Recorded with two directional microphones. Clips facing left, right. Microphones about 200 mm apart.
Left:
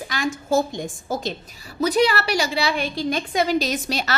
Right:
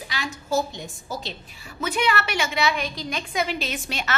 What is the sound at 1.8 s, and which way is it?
A woman's voice, 35° left (ahead or behind).